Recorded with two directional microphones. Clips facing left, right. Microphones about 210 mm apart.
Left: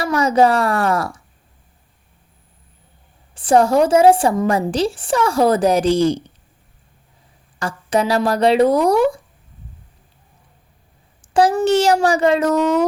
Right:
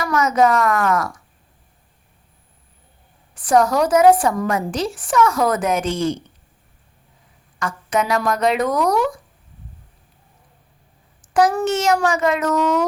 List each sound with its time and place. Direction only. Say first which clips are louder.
0.0 s a woman's voice: left 2 dB; 30° left (ahead or behind)
3.3 s a woman's voice: left 3 dB; 30° left (ahead or behind)
7.6 s a woman's voice: left 3 dB; 30° left (ahead or behind)
11.2 s a woman's voice: left 2 dB; 30° left (ahead or behind)